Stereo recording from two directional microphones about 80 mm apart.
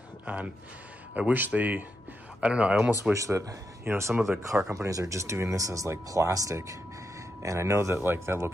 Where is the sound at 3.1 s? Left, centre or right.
Right.